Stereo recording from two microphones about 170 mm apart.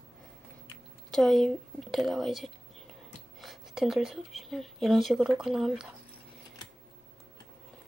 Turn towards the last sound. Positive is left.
turn(degrees=0)  # may be behind; listen again after turning